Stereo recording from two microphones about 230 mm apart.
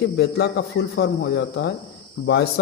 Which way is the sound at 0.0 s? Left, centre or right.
Left.